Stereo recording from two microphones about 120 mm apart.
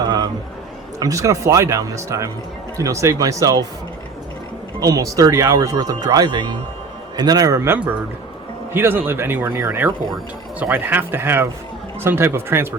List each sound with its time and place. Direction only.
0.0 s a man's voice: 35° right (ahead or behind)
4.8 s speech: 30° right (ahead or behind)